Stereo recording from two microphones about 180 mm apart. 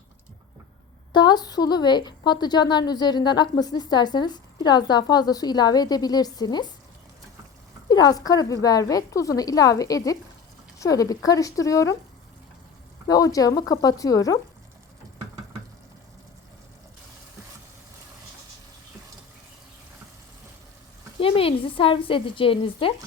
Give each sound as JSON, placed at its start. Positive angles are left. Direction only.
{"t": 1.1, "sound": "a woman's voice", "side_deg": 25}
{"t": 7.9, "sound": "a woman's voice", "side_deg": 20}
{"t": 13.1, "sound": "a woman's voice", "side_deg": 20}
{"t": 21.2, "sound": "a woman's voice", "side_deg": 30}